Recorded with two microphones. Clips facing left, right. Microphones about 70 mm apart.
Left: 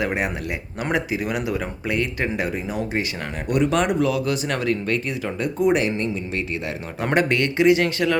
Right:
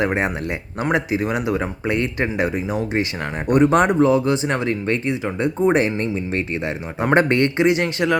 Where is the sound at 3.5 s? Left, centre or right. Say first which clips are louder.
Right 5 dB; right; by 8.2 s centre.